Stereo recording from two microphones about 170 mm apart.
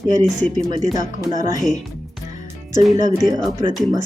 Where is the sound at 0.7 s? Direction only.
20° right (ahead or behind).